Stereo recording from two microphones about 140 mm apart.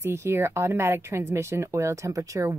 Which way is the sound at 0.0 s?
20° right (ahead or behind).